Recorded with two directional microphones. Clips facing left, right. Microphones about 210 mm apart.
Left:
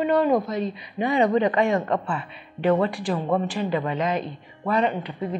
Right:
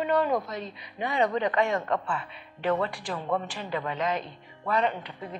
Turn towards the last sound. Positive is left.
turn(degrees=15)  # may be behind; listen again after turning